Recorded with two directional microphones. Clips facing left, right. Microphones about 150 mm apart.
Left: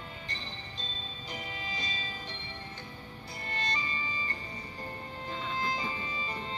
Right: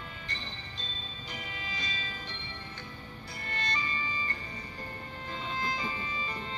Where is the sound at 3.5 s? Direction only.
30° left (ahead or behind).